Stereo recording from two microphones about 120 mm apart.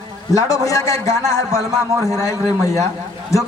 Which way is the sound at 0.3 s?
30° left (ahead or behind).